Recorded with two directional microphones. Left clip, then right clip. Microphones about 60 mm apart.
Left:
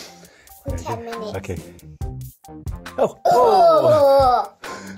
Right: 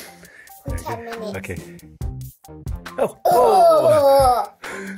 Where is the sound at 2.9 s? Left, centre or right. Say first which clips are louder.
Left 2 dB; left.